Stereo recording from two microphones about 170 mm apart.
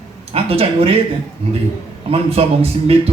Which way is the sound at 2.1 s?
35° right (ahead or behind).